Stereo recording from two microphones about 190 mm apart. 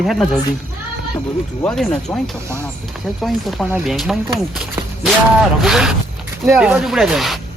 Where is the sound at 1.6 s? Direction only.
5° left (ahead or behind).